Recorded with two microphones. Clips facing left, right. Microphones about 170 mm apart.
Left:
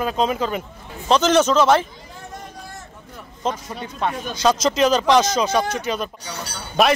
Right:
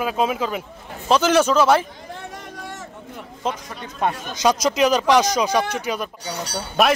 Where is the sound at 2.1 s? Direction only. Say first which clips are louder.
Left 2 dB; 80° right.